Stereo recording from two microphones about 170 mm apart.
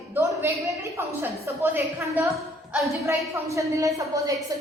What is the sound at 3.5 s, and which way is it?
Speech, 20° right (ahead or behind).